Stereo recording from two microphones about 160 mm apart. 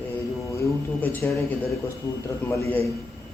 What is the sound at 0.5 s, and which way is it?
Speech, 10° left (ahead or behind).